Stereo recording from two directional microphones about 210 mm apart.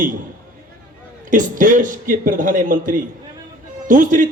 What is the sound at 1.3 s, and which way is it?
A man's voice, 40° right (ahead or behind).